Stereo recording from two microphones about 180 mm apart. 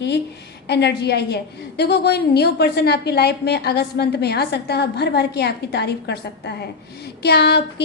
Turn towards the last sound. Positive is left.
turn(degrees=65)  # may be behind; listen again after turning